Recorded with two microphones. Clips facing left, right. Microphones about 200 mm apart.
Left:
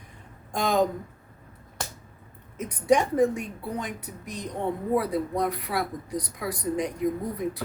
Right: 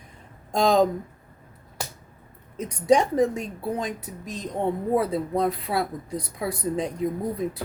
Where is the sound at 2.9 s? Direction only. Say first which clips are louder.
Right 1 dB; 25° right (ahead or behind).